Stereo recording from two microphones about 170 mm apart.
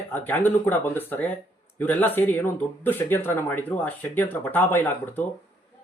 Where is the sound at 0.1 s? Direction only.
10° left (ahead or behind).